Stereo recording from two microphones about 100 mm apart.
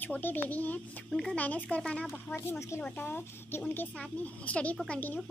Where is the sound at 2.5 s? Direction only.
30° left (ahead or behind).